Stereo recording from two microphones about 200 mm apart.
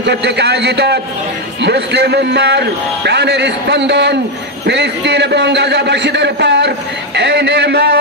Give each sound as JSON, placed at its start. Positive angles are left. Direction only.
{"t": 0.0, "sound": "a man's voice", "side_deg": -55}